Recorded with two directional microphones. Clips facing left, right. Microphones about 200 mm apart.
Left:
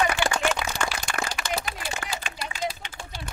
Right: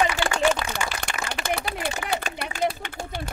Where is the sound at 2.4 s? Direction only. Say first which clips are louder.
Right 5 dB; 55° right (ahead or behind).